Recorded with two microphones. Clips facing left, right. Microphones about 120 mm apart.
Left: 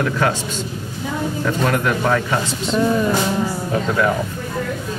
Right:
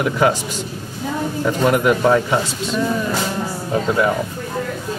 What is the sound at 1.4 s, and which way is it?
Speech, 15° right (ahead or behind).